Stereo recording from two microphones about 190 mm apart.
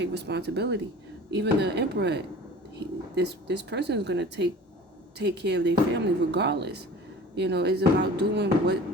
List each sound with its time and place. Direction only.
0.0 s speech: 60° right (ahead or behind)